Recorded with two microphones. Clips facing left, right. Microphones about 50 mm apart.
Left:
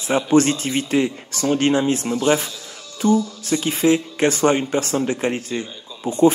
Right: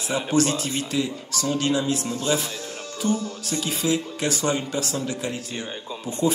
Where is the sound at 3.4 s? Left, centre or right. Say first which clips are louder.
Left 6 dB; left.